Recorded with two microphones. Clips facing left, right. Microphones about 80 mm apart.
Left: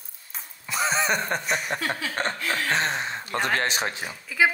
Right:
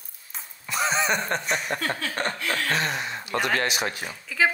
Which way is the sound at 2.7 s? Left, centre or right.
Left.